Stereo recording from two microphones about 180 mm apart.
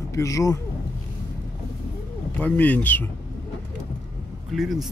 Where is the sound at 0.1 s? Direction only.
15° left (ahead or behind).